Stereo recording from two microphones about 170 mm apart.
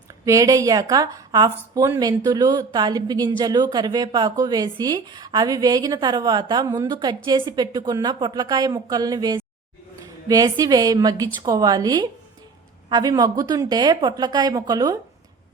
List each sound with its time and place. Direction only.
0.3 s speech: 20° right (ahead or behind)